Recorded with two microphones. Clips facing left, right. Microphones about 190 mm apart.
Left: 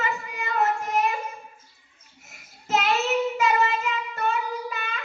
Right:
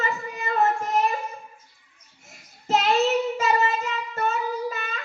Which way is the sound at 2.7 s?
30° right (ahead or behind).